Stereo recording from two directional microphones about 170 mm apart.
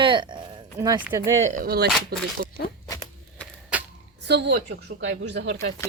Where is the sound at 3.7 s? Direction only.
5° right (ahead or behind).